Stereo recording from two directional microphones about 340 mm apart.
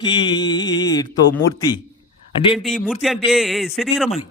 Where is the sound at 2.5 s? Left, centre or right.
Centre.